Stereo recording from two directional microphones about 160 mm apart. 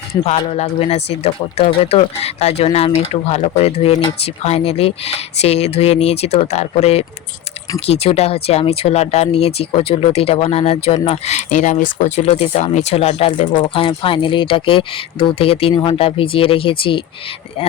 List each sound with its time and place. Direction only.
0.3 s speech: 40° left (ahead or behind)